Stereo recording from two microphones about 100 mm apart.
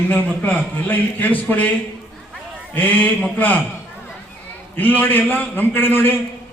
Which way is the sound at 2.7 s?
15° left (ahead or behind).